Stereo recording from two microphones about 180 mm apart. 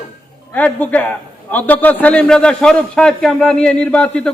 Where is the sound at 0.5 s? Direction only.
10° left (ahead or behind).